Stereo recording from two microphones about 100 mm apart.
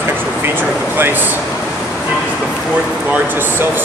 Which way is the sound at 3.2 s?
20° right (ahead or behind).